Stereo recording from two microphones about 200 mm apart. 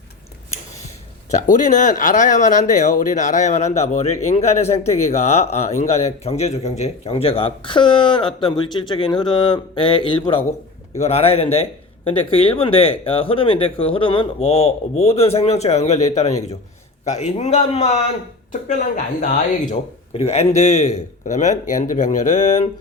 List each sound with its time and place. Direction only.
1.3 s a man's voice: 40° left (ahead or behind)